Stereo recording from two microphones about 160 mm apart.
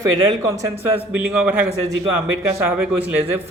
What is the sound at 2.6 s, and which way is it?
Speech, 10° right (ahead or behind).